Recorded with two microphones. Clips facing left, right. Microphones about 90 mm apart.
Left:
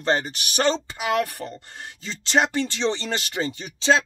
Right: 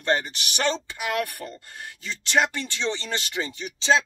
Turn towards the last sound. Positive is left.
turn(degrees=35)  # may be behind; listen again after turning